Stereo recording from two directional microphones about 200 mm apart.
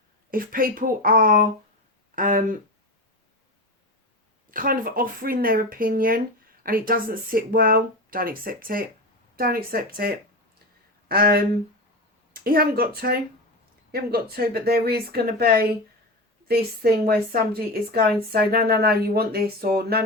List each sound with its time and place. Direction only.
0.3 s speech: 45° right (ahead or behind)
4.5 s speech: 45° right (ahead or behind)